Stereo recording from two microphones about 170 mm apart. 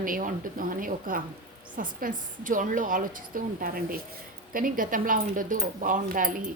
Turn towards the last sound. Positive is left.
turn(degrees=-55)  # may be behind; listen again after turning